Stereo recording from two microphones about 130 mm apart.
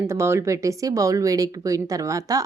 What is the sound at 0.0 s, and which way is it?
Speech, 20° right (ahead or behind).